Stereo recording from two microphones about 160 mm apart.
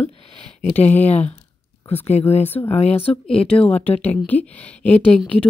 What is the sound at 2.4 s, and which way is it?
Speech, 15° left (ahead or behind).